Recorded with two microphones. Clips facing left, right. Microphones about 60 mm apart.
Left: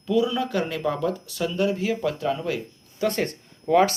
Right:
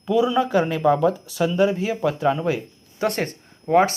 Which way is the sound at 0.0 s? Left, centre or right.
Centre.